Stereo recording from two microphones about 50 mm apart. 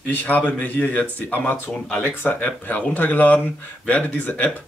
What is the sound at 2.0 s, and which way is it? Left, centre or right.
Speech, left.